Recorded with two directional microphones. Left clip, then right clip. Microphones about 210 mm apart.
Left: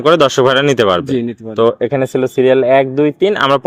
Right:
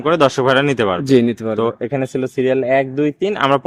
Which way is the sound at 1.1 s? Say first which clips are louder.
Right 4 dB; 55° right (ahead or behind).